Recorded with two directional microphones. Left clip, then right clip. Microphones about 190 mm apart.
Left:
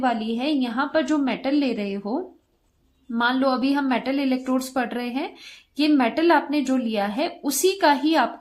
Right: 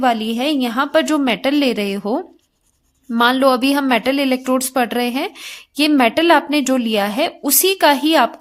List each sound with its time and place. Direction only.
0.0 s a woman's voice: 40° right (ahead or behind)